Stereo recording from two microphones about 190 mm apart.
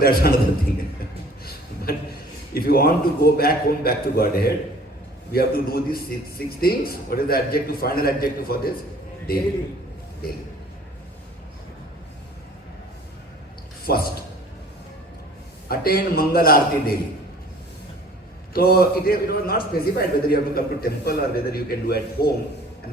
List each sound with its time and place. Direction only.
0.0 s a man's voice: 55° left (ahead or behind)
1.5 s a sound: 55° left (ahead or behind)
2.6 s a man's voice: 55° left (ahead or behind)
13.8 s a man's voice: 55° left (ahead or behind)
15.7 s a man's voice: 50° left (ahead or behind)
18.5 s a man's voice: 55° left (ahead or behind)